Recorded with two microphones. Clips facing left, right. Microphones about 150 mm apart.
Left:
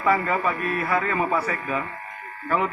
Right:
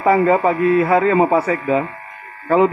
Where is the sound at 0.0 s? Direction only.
25° right (ahead or behind).